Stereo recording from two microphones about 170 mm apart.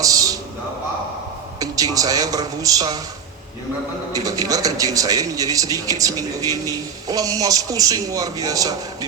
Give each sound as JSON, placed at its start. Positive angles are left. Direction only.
{"t": 0.0, "sound": "a sound", "side_deg": -20}
{"t": 1.5, "sound": "speech", "side_deg": -20}
{"t": 4.1, "sound": "speech", "side_deg": -20}